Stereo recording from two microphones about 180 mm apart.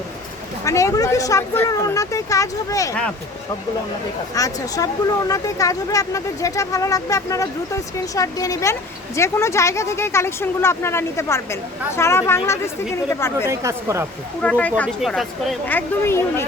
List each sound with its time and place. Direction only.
0.6 s speech: 15° left (ahead or behind)
4.4 s speech: 20° left (ahead or behind)
13.5 s speech: 15° right (ahead or behind)
14.4 s speech: 10° left (ahead or behind)